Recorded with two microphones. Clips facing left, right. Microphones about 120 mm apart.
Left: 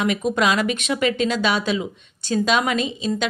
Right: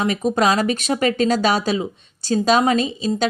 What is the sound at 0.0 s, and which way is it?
A woman's voice, 35° right (ahead or behind).